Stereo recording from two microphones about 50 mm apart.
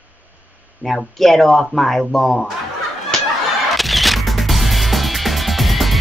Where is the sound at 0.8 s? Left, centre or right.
Centre.